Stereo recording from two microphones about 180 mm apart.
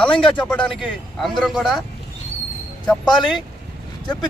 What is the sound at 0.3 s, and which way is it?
A man's voice, 5° left (ahead or behind).